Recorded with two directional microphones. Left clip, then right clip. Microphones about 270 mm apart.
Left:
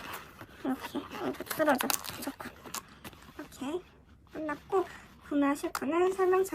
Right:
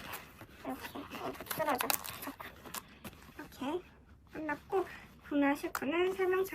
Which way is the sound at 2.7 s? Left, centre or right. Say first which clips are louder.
Left 4 dB; centre.